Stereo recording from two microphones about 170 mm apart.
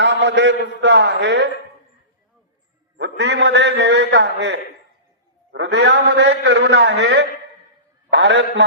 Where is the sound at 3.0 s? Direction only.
90° right.